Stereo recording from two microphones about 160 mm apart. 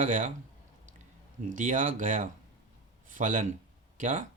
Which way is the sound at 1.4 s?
55° right (ahead or behind).